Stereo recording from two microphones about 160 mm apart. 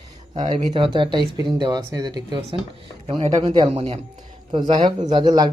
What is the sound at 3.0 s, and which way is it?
Speech, 40° right (ahead or behind).